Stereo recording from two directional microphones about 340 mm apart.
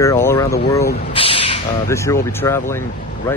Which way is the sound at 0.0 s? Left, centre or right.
Centre.